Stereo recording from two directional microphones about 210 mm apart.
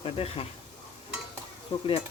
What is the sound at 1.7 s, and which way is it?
Speech, 25° left (ahead or behind).